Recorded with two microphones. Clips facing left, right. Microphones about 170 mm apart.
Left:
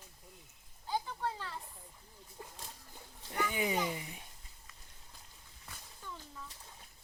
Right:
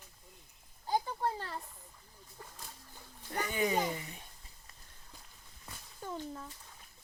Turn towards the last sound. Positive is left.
turn(degrees=-50)  # may be behind; listen again after turning